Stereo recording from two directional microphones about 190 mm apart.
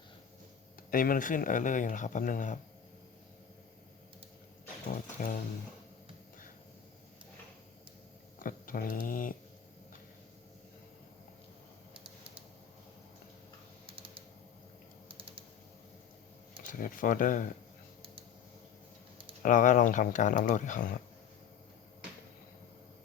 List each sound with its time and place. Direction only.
0.9 s speech: 50° left (ahead or behind)
4.9 s speech: 45° left (ahead or behind)
8.4 s speech: 45° left (ahead or behind)
13.8 s typing: 30° right (ahead or behind)
16.6 s speech: 45° left (ahead or behind)
19.4 s speech: 45° left (ahead or behind)